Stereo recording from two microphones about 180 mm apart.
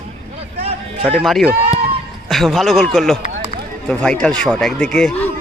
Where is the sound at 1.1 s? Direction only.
Centre (ahead or behind).